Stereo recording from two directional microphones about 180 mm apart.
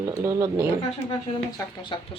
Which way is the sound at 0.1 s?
15° right (ahead or behind).